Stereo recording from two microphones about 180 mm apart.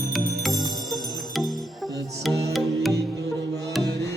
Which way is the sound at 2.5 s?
Centre (ahead or behind).